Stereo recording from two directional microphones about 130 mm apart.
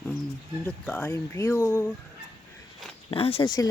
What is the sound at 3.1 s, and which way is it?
Speech, 45° left (ahead or behind).